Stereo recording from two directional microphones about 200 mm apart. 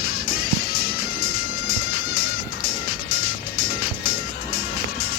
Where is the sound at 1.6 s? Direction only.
85° left.